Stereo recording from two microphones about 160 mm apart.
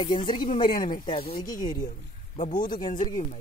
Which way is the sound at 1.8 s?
50° left (ahead or behind).